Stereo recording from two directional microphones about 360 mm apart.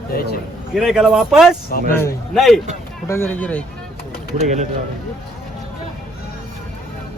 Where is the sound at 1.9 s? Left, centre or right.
Centre.